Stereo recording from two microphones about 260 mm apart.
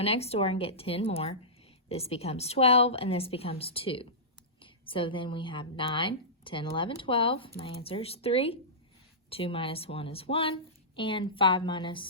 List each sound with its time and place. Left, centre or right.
0.0 s a woman's voice: left